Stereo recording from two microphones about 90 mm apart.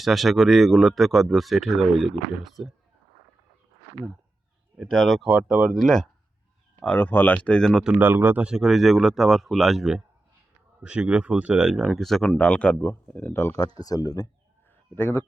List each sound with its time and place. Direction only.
0.0 s speech: centre (ahead or behind)
4.8 s speech: centre (ahead or behind)
6.7 s speech: 15° left (ahead or behind)
7.9 s speech: 25° right (ahead or behind)
8.4 s speech: 5° right (ahead or behind); by 13.7 s 30° left (ahead or behind)
13.7 s speech: 45° left (ahead or behind)
14.9 s speech: 20° left (ahead or behind)